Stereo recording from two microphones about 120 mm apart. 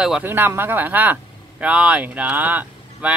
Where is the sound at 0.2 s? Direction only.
15° right (ahead or behind).